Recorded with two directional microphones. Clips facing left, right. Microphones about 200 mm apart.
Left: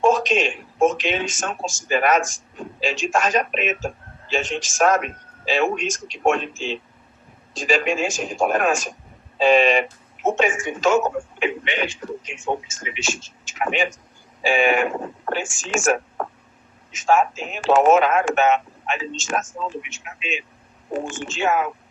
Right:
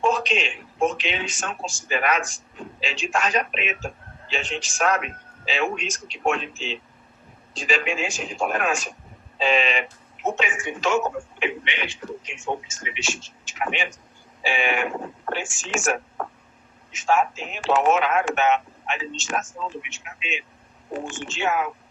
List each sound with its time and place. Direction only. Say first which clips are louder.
0.0 s a man's voice: left 5 dB; 45° left (ahead or behind)